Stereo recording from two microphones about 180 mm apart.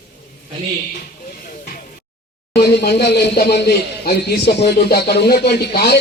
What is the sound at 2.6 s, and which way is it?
A man's voice, 65° left (ahead or behind).